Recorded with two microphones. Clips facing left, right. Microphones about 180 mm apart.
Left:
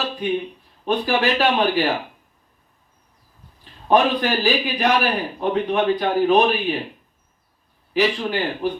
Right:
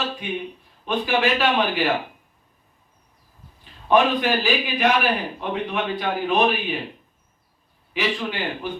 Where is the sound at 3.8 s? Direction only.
40° left (ahead or behind).